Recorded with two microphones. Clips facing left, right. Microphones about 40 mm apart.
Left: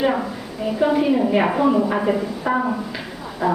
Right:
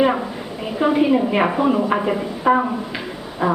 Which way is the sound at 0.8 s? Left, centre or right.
Right.